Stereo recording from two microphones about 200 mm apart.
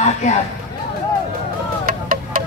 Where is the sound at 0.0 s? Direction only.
35° left (ahead or behind).